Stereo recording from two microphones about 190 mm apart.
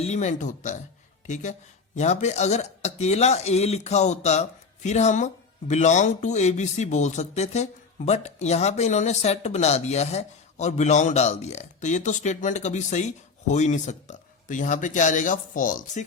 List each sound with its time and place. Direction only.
0.0 s speech: 35° left (ahead or behind)